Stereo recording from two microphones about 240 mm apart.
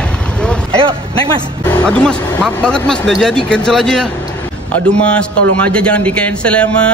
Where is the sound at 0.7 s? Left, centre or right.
Right.